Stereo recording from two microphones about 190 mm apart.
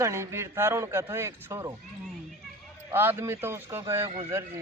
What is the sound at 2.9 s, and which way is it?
Speech, 10° right (ahead or behind).